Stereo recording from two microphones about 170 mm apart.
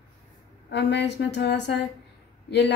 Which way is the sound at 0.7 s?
90° left.